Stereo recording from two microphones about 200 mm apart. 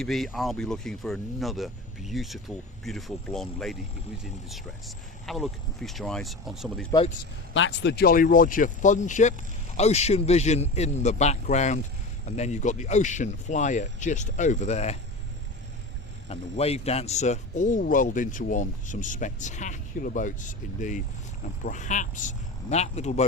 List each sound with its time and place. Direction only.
0.0 s speech: centre (ahead or behind)
7.5 s speech: 70° left (ahead or behind); by 14.9 s 35° left (ahead or behind)
16.3 s speech: 30° left (ahead or behind)